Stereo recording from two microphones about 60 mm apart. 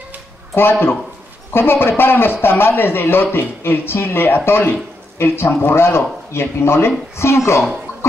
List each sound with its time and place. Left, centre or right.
0.6 s speech: left